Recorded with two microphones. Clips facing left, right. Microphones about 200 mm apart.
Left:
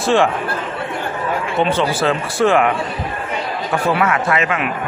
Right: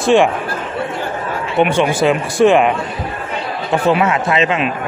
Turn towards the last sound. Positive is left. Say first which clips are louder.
# right 3 dB
turn(degrees=-20)  # may be behind; listen again after turning